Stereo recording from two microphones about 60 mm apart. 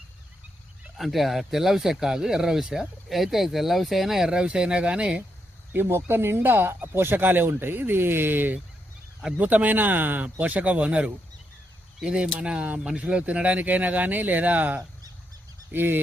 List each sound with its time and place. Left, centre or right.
0.9 s speech: centre
5.7 s speech: right
15.7 s speech: right